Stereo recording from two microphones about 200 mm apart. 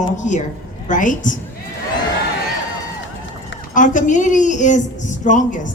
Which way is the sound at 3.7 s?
40° left (ahead or behind).